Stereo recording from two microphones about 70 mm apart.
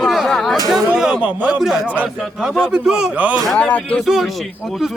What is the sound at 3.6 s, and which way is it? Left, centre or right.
Speech, left.